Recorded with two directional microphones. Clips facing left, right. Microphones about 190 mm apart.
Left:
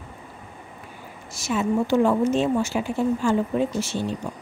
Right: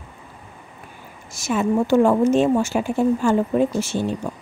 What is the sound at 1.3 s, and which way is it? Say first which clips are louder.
A woman's voice: right 3 dB; 50° right (ahead or behind).